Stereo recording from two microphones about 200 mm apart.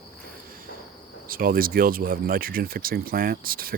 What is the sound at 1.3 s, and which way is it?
Speech, 45° right (ahead or behind).